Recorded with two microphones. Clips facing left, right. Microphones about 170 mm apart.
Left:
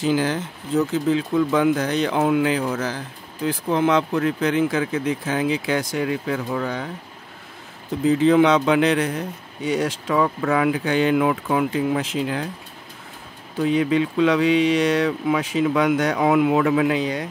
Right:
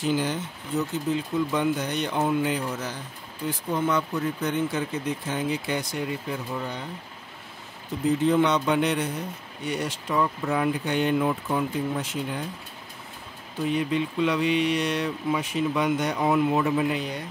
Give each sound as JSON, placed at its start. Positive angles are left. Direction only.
{"t": 0.0, "sound": "speech", "side_deg": 90}
{"t": 8.1, "sound": "speech", "side_deg": 90}
{"t": 13.6, "sound": "speech", "side_deg": 90}